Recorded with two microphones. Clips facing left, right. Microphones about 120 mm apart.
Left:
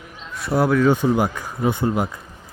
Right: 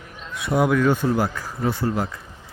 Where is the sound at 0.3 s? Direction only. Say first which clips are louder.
Left 1 dB; centre (ahead or behind).